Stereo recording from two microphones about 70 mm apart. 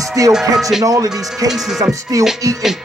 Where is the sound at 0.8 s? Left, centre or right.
Right.